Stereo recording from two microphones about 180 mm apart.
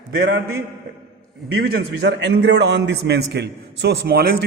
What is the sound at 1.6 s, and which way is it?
A man's voice, 65° right (ahead or behind).